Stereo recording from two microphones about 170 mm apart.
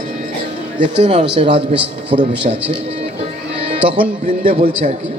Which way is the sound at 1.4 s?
30° right (ahead or behind).